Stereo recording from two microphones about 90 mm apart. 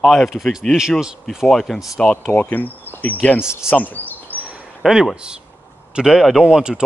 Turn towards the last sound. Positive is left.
turn(degrees=-10)  # may be behind; listen again after turning